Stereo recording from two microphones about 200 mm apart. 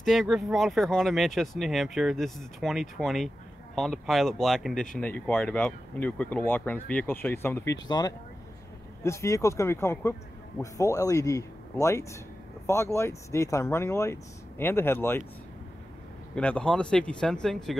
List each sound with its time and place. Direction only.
0.0 s speech: centre (ahead or behind)
16.3 s speech: 5° left (ahead or behind)